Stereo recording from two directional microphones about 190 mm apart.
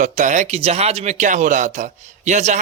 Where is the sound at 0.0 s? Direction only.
40° right (ahead or behind).